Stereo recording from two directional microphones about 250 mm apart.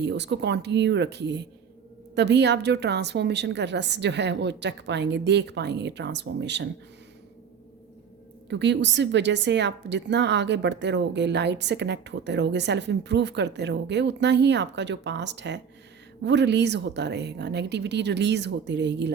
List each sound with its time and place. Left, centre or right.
0.0 s a woman's voice: right
8.4 s a woman's voice: right